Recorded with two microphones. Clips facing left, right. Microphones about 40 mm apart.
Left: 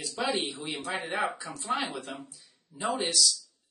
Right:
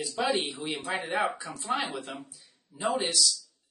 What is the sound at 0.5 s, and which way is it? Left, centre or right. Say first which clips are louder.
Speech: right 2 dB; right.